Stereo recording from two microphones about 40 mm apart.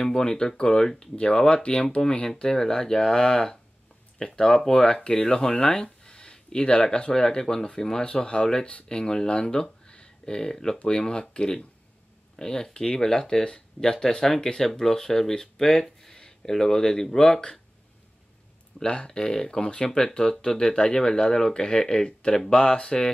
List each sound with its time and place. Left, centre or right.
0.0 s speech: centre
18.9 s speech: left